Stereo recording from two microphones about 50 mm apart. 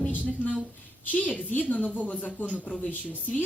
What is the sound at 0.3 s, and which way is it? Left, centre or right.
A woman's voice, left.